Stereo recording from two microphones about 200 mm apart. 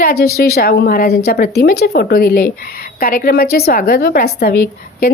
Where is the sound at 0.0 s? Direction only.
50° left (ahead or behind).